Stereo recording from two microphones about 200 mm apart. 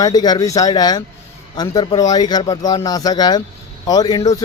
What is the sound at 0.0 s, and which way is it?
A man's voice, 20° left (ahead or behind).